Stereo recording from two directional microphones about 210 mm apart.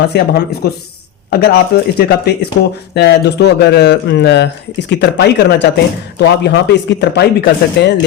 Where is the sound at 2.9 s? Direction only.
55° left (ahead or behind).